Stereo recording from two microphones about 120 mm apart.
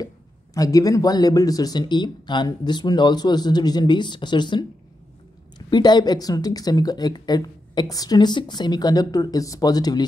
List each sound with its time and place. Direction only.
0.6 s speech: 30° left (ahead or behind)
5.7 s speech: 35° left (ahead or behind)